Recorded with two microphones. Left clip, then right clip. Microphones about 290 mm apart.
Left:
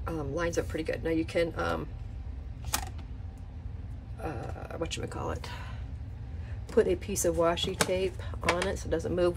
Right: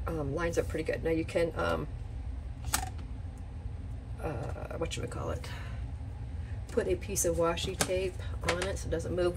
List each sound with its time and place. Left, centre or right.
0.0 s speech: centre
4.2 s speech: centre
6.7 s speech: centre